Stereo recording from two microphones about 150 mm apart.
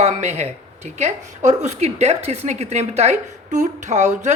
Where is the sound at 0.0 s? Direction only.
50° right (ahead or behind).